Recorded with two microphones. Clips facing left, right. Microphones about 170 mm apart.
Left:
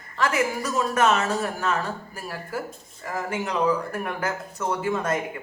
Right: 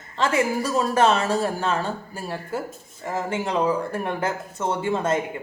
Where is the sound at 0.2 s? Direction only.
30° right (ahead or behind).